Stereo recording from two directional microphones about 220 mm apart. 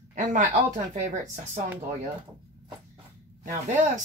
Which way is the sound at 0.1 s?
35° right (ahead or behind).